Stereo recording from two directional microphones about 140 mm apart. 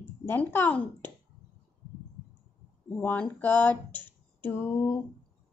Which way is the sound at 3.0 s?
15° left (ahead or behind).